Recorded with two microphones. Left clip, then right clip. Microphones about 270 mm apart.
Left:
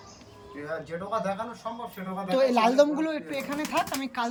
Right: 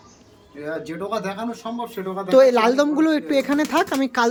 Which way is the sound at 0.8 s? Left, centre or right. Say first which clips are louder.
Right 2 dB; right.